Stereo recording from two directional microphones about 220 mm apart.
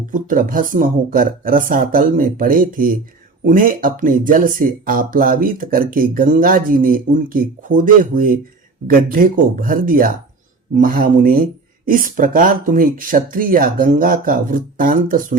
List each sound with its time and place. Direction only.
0.0 s speech: 35° right (ahead or behind)